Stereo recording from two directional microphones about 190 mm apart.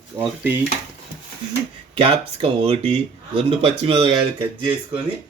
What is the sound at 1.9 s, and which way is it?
Speech, 30° right (ahead or behind).